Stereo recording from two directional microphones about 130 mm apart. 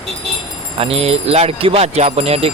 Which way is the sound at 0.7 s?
50° right (ahead or behind).